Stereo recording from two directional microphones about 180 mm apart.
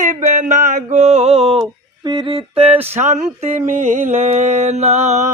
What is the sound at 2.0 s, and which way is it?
Humming, 25° right (ahead or behind).